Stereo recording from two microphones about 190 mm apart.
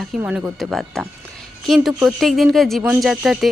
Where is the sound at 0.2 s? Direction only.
10° right (ahead or behind).